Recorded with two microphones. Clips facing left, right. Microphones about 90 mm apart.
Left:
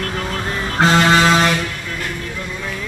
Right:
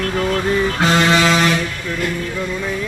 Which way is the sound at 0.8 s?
40° left (ahead or behind).